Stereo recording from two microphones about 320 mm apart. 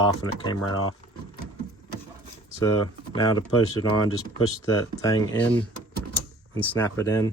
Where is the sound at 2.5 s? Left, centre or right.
Centre.